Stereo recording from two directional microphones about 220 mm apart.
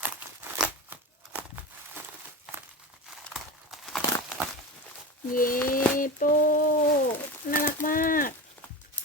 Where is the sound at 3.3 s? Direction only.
Centre (ahead or behind).